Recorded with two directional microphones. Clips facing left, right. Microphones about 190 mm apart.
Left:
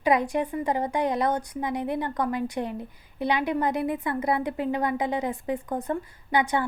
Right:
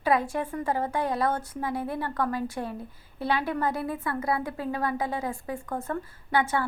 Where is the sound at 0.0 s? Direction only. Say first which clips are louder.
Left 2 dB; 15° left (ahead or behind).